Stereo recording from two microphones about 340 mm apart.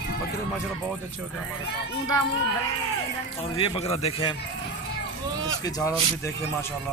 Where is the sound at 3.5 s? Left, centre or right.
Centre.